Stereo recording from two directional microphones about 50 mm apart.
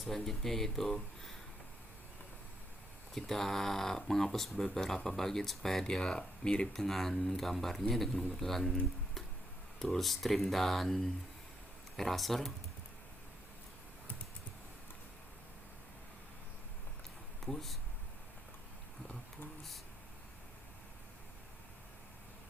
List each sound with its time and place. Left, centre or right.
0.0 s speech: centre
3.2 s speech: centre
6.8 s speech: centre
17.4 s speech: centre